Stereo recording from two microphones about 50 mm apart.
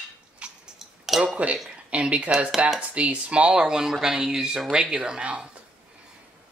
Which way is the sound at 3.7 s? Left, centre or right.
Centre.